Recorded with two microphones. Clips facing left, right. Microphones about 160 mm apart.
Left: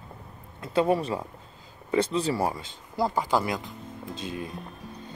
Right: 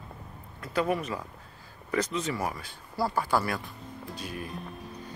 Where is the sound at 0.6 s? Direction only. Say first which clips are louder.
Left 5 dB; 25° left (ahead or behind).